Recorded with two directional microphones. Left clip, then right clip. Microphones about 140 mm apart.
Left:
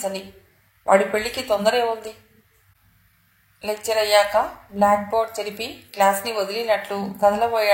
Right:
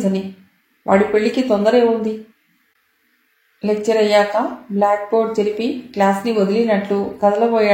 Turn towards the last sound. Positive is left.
turn(degrees=45)  # may be behind; listen again after turning